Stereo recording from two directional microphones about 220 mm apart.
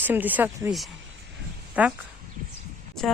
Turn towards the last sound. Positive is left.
turn(degrees=0)  # may be behind; listen again after turning